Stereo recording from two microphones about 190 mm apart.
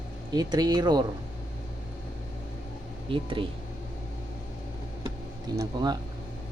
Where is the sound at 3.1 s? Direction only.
25° right (ahead or behind).